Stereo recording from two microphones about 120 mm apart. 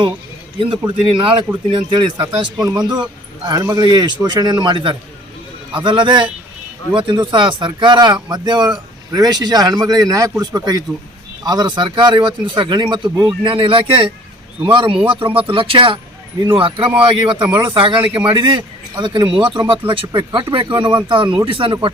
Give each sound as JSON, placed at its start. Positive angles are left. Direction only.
{"t": 1.0, "sound": "speech", "side_deg": -45}